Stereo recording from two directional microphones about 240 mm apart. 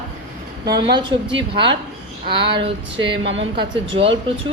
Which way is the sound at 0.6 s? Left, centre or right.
Centre.